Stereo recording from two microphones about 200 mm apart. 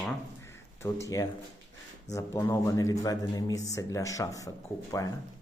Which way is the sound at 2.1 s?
15° left (ahead or behind).